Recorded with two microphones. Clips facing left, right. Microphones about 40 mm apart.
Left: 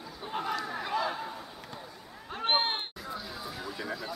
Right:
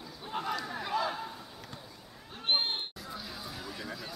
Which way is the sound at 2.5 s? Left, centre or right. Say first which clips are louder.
Left 2 dB; centre.